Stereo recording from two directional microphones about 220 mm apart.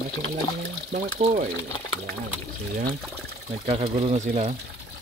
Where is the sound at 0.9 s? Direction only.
35° right (ahead or behind).